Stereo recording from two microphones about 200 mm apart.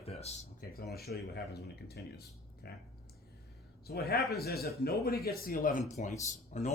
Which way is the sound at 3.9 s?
50° left (ahead or behind).